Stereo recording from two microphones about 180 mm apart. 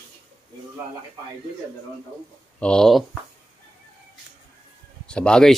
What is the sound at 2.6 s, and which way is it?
Speech, 5° left (ahead or behind).